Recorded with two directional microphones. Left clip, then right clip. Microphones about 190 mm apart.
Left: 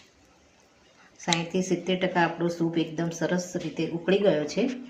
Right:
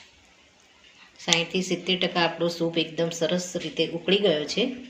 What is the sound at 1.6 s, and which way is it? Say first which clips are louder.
Speech: right 1 dB; 45° left (ahead or behind).